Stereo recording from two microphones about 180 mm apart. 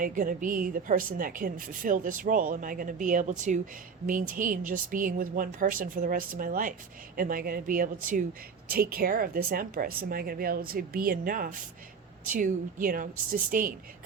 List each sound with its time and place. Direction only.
0.0 s a woman's voice: 50° right (ahead or behind)